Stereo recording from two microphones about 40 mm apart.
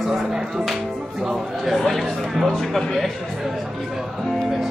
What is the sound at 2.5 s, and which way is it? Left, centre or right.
Speech, centre.